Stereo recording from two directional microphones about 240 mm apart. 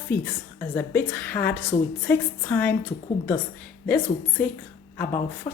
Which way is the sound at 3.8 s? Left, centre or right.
Centre.